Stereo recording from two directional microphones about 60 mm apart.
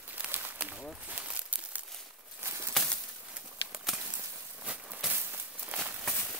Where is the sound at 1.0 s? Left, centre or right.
Right.